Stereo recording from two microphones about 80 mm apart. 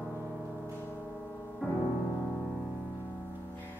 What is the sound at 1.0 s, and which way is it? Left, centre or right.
Gong, centre.